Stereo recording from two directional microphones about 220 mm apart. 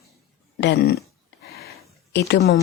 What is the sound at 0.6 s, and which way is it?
Speech, 50° left (ahead or behind).